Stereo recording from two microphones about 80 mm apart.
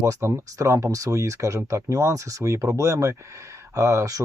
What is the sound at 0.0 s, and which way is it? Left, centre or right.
Speech, right.